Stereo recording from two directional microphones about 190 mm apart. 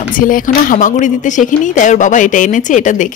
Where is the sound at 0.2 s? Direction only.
45° left (ahead or behind).